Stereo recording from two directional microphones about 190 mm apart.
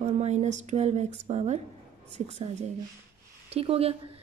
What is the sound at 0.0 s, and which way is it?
A woman's voice, 35° right (ahead or behind).